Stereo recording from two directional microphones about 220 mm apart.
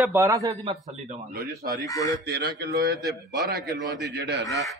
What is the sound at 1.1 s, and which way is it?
Speech, 40° right (ahead or behind).